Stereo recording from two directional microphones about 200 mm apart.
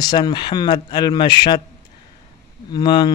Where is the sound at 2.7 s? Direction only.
20° left (ahead or behind).